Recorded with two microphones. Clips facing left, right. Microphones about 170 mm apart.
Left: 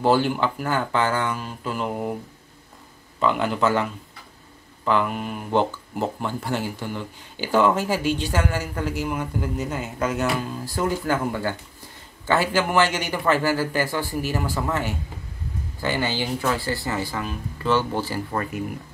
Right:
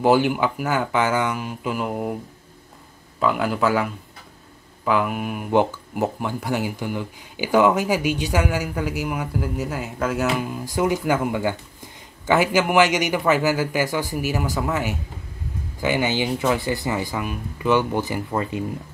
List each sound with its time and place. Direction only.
0.0 s speech: 10° right (ahead or behind)
3.2 s speech: 5° right (ahead or behind)
10.3 s speech: 15° right (ahead or behind)